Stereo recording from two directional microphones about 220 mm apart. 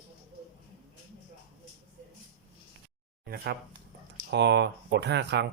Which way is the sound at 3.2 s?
45° right (ahead or behind).